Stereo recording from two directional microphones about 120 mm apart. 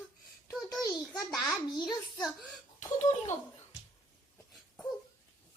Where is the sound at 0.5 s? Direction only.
Centre (ahead or behind).